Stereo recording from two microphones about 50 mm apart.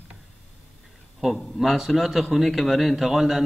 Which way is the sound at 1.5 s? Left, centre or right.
Centre.